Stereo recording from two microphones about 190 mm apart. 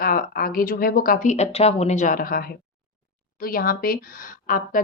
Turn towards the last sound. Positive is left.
turn(degrees=45)  # may be behind; listen again after turning